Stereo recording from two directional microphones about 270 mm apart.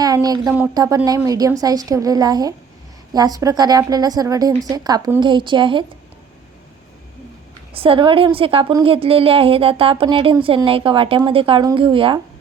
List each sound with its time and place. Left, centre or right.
0.0 s a woman's voice: centre
7.7 s a woman's voice: centre